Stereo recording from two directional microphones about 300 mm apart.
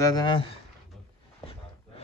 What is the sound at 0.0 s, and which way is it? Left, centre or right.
Speech, centre.